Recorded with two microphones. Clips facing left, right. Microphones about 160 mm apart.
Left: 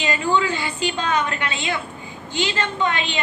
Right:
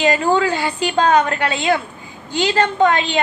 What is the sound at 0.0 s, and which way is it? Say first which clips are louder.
A woman's voice: right 5 dB; 40° right (ahead or behind).